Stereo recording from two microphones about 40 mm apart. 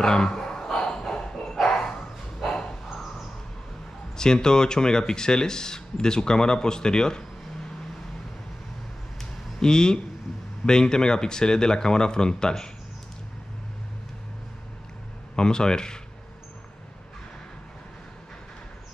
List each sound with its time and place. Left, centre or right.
0.0 s a sound: centre
1.1 s bow-wow: centre
4.2 s speech: centre
9.2 s a sound: centre
10.6 s speech: centre
15.3 s speech: centre